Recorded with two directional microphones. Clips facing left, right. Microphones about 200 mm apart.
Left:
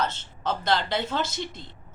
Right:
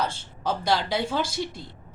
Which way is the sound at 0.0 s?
10° right (ahead or behind).